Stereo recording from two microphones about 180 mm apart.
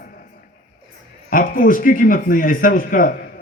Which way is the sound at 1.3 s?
50° left (ahead or behind).